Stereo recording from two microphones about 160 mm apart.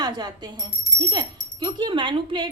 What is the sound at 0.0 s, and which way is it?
Speech, 25° right (ahead or behind).